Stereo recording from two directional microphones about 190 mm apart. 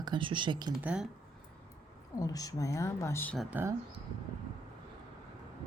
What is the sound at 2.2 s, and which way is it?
Speech, 20° left (ahead or behind).